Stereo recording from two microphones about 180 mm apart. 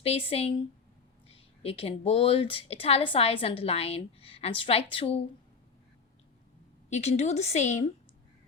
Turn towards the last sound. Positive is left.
turn(degrees=40)  # may be behind; listen again after turning